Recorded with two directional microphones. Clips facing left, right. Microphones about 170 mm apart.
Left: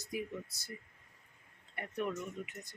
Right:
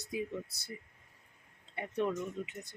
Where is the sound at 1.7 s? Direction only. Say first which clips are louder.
Right 4 dB; 25° right (ahead or behind).